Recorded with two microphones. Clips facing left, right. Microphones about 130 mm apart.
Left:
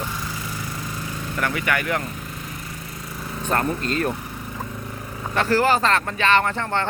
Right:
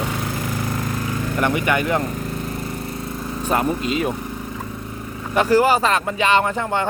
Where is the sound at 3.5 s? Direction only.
10° right (ahead or behind).